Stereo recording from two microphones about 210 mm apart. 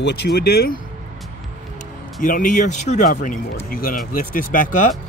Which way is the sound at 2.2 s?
40° left (ahead or behind).